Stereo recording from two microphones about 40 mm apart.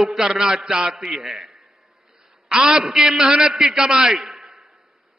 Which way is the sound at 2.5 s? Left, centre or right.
Centre.